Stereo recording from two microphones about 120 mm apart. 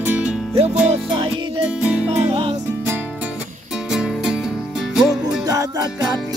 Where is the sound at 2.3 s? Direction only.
60° right (ahead or behind).